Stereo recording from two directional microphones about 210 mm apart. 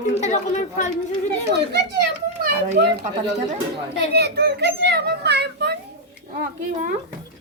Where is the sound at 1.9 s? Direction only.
50° right (ahead or behind).